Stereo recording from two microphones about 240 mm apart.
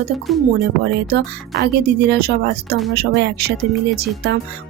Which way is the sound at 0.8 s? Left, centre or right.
Right.